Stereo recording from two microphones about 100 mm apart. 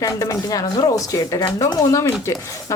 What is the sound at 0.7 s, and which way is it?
Speech, 45° left (ahead or behind).